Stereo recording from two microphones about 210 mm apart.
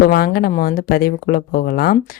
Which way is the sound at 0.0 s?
45° left (ahead or behind).